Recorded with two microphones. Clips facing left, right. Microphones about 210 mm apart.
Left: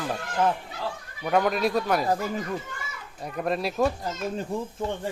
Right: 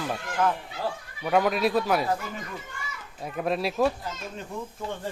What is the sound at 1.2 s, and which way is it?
Speech, centre (ahead or behind).